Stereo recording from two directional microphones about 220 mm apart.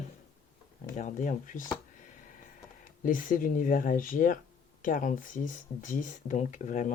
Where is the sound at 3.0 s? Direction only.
40° left (ahead or behind).